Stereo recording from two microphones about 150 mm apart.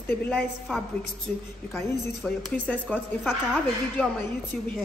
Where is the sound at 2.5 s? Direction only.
10° left (ahead or behind).